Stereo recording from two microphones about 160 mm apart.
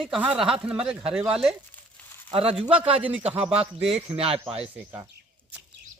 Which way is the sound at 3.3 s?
35° right (ahead or behind).